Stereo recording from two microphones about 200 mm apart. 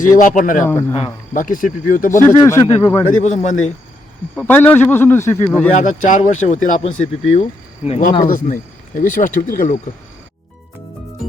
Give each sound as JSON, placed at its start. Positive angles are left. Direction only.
{"t": 0.0, "sound": "speech", "side_deg": 40}
{"t": 0.7, "sound": "a man's voice", "side_deg": 10}
{"t": 0.9, "sound": "speech", "side_deg": 35}
{"t": 2.4, "sound": "a man's voice", "side_deg": 15}
{"t": 3.2, "sound": "speech", "side_deg": 40}
{"t": 4.4, "sound": "a man's voice", "side_deg": 10}
{"t": 5.7, "sound": "speech", "side_deg": 40}